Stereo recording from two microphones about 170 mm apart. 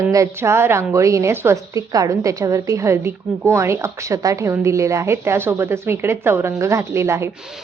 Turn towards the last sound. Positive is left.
turn(degrees=-15)  # may be behind; listen again after turning